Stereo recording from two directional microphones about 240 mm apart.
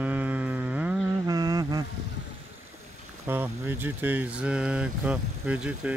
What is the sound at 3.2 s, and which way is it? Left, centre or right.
Speech, centre.